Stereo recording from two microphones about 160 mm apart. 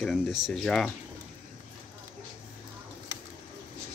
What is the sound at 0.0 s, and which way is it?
Speech, centre (ahead or behind).